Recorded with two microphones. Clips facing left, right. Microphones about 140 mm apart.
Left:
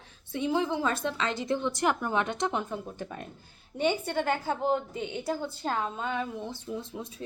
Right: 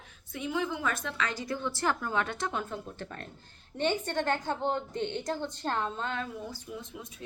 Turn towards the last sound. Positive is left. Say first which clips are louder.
# left 5 dB
turn(degrees=30)  # may be behind; listen again after turning